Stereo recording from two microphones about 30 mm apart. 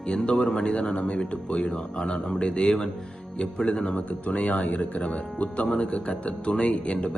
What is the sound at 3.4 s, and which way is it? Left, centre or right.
Speech, left.